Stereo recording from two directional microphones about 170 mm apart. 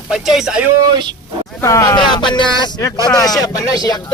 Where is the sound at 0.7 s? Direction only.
25° right (ahead or behind).